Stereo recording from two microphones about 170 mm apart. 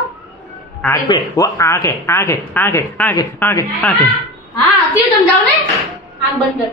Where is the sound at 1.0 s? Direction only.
20° left (ahead or behind).